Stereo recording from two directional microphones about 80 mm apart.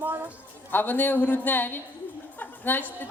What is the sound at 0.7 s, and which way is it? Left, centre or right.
A woman's voice, left.